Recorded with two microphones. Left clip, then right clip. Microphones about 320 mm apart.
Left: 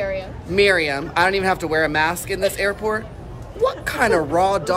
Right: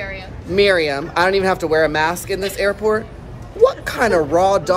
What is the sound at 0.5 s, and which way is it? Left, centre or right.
Speech, centre.